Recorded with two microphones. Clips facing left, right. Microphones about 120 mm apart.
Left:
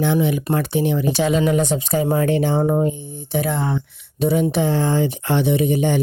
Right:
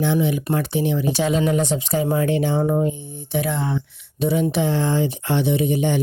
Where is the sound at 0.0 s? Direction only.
55° left (ahead or behind).